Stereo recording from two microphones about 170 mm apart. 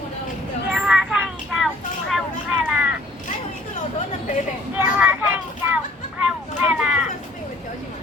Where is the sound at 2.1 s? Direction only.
5° right (ahead or behind).